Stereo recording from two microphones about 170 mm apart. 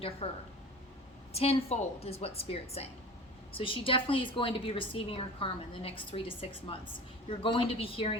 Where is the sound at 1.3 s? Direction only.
35° left (ahead or behind).